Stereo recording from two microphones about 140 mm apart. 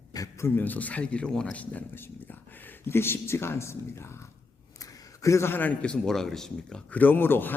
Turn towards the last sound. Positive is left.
turn(degrees=15)  # may be behind; listen again after turning